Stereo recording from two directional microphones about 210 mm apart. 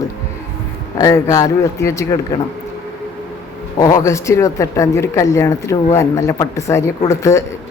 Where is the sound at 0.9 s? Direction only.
15° left (ahead or behind).